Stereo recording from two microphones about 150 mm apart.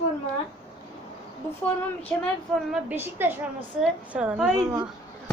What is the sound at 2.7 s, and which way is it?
A woman's voice, 10° right (ahead or behind).